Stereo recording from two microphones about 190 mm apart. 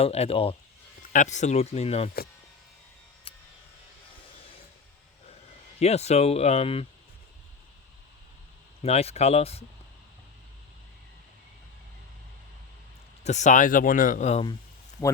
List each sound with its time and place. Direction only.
0.0 s speech: 30° left (ahead or behind)
3.3 s a sound: 30° left (ahead or behind)
5.8 s speech: 35° left (ahead or behind)
8.8 s speech: 35° left (ahead or behind)
13.2 s speech: 35° left (ahead or behind)